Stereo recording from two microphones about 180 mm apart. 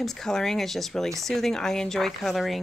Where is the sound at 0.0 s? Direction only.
5° left (ahead or behind).